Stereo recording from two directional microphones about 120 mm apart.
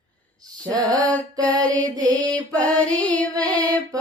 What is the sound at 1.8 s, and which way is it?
Mantra, 30° right (ahead or behind).